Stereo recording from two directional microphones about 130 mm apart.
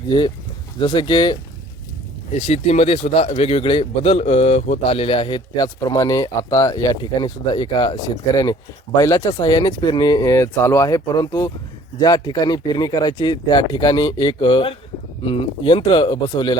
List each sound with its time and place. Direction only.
0.8 s speech: 40° left (ahead or behind)
2.3 s speech: 55° left (ahead or behind); by 7.9 s 35° left (ahead or behind)
9.0 s speech: 25° left (ahead or behind)